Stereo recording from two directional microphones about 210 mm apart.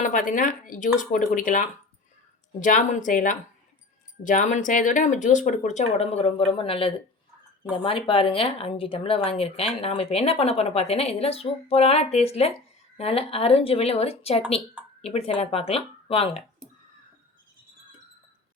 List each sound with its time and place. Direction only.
0.0 s speech: 40° left (ahead or behind)